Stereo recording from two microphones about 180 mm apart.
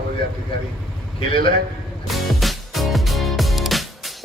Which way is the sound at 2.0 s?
Centre (ahead or behind).